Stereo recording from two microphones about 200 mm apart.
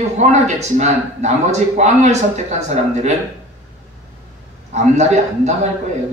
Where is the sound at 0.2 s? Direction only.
35° right (ahead or behind).